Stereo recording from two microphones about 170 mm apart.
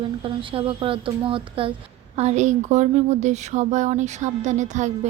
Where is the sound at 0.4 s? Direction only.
30° right (ahead or behind).